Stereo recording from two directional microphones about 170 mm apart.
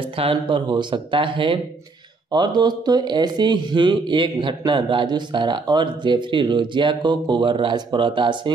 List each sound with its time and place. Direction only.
0.0 s speech: 35° right (ahead or behind)